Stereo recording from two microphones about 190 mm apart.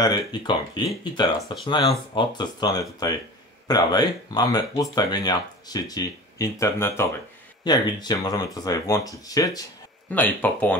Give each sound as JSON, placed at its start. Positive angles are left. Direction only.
{"t": 0.0, "sound": "speech", "side_deg": 20}